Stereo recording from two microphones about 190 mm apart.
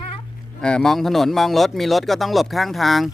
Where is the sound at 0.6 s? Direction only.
5° left (ahead or behind).